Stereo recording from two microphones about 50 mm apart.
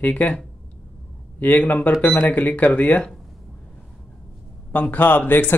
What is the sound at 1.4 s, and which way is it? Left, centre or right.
Speech, left.